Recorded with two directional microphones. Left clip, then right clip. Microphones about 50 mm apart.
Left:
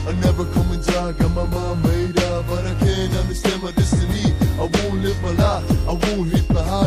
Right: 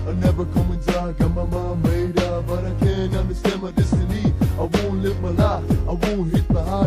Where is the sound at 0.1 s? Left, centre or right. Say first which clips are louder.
Left 1 dB; right.